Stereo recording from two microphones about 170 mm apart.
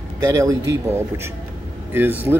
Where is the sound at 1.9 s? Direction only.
10° right (ahead or behind).